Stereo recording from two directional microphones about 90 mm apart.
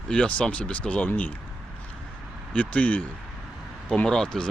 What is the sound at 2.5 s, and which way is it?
Speech, 15° left (ahead or behind).